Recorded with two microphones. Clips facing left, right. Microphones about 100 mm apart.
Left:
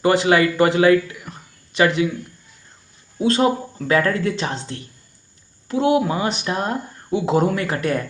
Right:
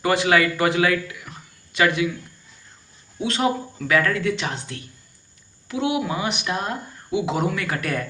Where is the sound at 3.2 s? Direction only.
35° left (ahead or behind).